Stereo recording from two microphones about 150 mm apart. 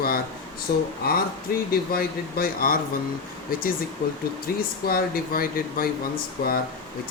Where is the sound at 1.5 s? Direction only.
75° left (ahead or behind).